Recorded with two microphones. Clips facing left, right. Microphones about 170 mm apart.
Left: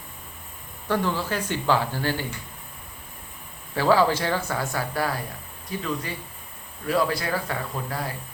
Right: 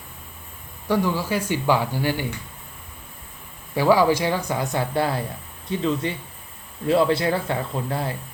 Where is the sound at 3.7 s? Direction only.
15° right (ahead or behind).